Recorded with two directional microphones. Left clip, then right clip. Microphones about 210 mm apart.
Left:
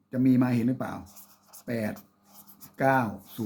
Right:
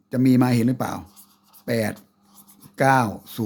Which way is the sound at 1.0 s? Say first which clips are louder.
Right 3 dB; 15° left (ahead or behind).